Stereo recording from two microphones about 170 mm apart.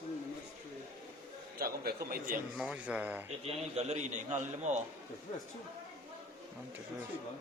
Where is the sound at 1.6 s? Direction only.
60° right (ahead or behind).